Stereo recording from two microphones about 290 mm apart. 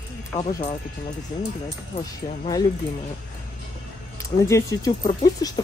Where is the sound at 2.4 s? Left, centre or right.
Centre.